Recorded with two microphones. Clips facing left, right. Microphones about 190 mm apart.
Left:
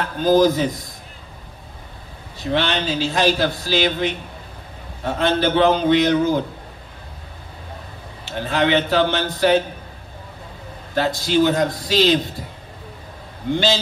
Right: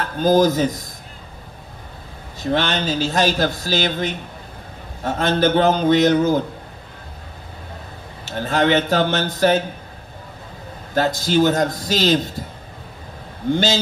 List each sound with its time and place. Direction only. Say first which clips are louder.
0.0 s speech: even; 45° right (ahead or behind)
2.4 s speech: right 1 dB; 45° right (ahead or behind)
8.3 s speech: right 1 dB; 45° right (ahead or behind)
11.0 s speech: right 1 dB; 45° right (ahead or behind)
13.5 s speech: right 1 dB; 45° right (ahead or behind)